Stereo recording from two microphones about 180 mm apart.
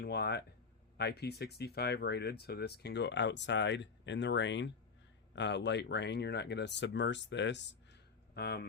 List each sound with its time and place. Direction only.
0.0 s speech: 65° left (ahead or behind)
8.4 s speech: 65° left (ahead or behind)